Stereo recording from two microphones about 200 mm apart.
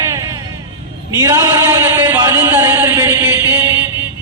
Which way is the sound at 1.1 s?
15° right (ahead or behind).